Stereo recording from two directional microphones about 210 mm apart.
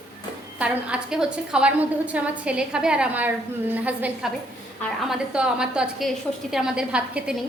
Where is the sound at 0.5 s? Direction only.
5° right (ahead or behind).